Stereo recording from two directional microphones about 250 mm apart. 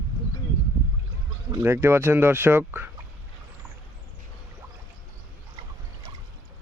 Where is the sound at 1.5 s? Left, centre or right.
Centre.